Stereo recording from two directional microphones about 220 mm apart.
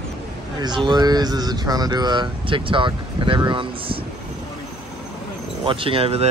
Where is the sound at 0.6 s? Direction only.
20° right (ahead or behind).